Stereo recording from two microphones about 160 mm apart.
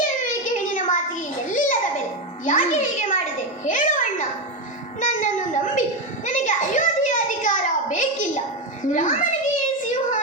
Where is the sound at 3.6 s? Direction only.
55° left (ahead or behind).